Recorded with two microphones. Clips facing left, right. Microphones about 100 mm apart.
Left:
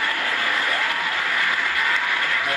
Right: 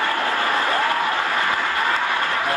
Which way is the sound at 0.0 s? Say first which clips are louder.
Right 4 dB; 25° right (ahead or behind).